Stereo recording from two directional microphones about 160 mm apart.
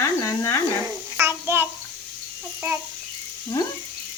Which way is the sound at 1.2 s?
15° right (ahead or behind).